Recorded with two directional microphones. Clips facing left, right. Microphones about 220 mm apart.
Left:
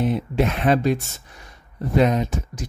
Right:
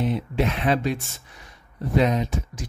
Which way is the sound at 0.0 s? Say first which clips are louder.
Left 3 dB; 45° left (ahead or behind).